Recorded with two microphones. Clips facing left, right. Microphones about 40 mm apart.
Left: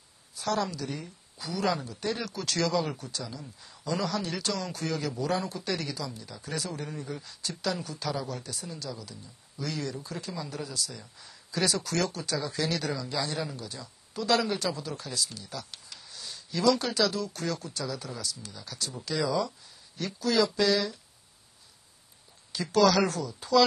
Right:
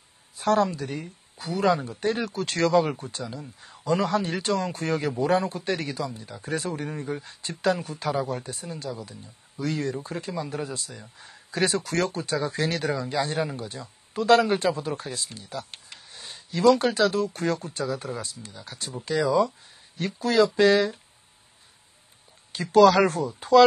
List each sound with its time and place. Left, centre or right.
0.4 s speech: right
22.5 s speech: right